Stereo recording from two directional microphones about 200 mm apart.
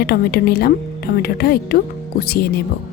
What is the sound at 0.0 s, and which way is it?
Speech, 50° left (ahead or behind).